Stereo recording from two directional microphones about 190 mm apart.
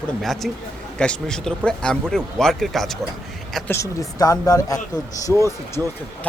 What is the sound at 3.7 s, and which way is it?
A man's voice, 15° left (ahead or behind).